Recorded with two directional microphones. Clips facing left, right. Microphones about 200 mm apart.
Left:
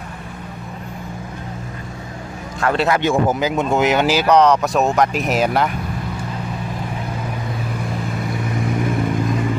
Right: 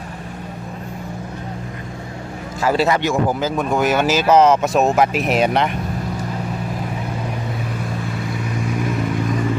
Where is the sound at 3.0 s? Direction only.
20° left (ahead or behind).